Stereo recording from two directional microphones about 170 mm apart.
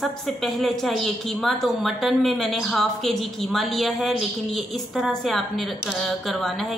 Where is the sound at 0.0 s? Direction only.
Centre (ahead or behind).